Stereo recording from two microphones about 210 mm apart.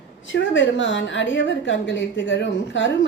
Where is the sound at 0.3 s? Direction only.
60° left (ahead or behind).